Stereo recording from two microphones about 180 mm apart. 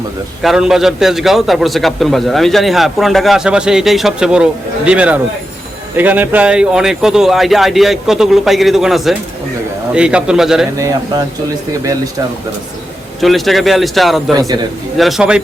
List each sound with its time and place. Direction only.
0.4 s a man's voice: 5° right (ahead or behind)
10.8 s speech: 15° right (ahead or behind)
13.2 s a man's voice: centre (ahead or behind)
14.3 s a man's voice: 20° right (ahead or behind)
14.9 s a man's voice: centre (ahead or behind)